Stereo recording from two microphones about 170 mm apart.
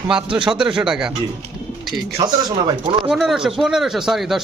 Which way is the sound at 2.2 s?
25° right (ahead or behind).